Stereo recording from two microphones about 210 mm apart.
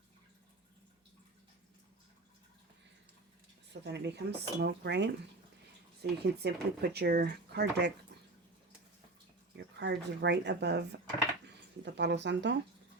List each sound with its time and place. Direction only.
3.7 s speech: 55° right (ahead or behind)
9.7 s speech: 55° right (ahead or behind)